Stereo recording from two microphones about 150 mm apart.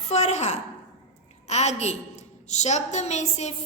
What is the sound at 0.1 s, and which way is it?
Speech, 50° left (ahead or behind).